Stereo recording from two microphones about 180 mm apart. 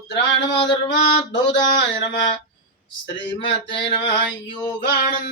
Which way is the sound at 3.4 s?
30° left (ahead or behind).